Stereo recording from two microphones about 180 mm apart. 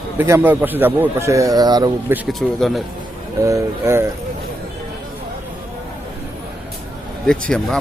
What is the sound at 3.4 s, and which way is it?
Speech, 15° right (ahead or behind).